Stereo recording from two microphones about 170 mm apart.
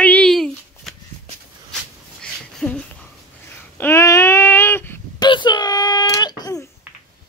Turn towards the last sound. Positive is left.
turn(degrees=20)  # may be behind; listen again after turning